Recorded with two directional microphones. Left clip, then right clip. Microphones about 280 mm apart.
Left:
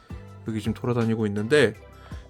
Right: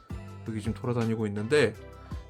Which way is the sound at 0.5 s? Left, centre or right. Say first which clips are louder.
Left 5 dB; centre.